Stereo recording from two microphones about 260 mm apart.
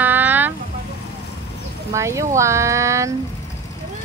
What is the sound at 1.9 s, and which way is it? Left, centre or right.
Speech, centre.